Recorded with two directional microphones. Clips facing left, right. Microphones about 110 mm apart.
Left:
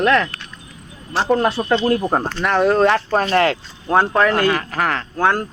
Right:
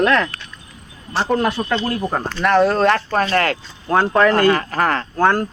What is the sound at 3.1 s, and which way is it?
Speech, 25° left (ahead or behind).